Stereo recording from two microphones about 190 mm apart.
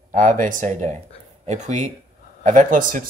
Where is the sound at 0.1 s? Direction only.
45° right (ahead or behind).